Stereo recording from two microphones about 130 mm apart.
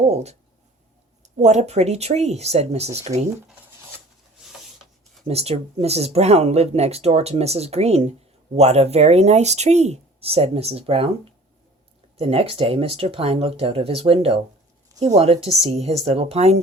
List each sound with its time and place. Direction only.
0.1 s speech: 55° right (ahead or behind)
5.3 s speech: 50° right (ahead or behind)
12.1 s speech: 50° right (ahead or behind)